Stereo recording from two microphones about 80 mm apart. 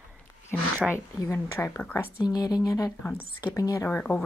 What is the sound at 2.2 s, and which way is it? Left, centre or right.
Speech, left.